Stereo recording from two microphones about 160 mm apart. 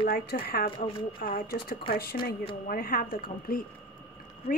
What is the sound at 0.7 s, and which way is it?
Speech, 30° left (ahead or behind).